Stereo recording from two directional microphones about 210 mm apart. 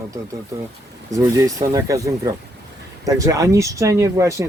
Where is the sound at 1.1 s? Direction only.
15° right (ahead or behind).